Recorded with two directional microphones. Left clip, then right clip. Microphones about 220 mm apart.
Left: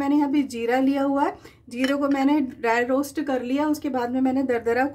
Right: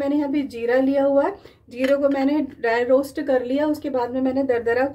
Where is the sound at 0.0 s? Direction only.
55° left (ahead or behind).